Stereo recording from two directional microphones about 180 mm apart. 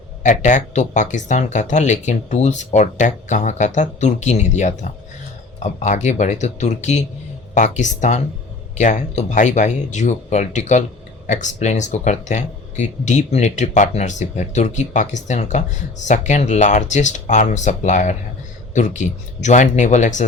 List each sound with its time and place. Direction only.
0.2 s speech: 45° left (ahead or behind)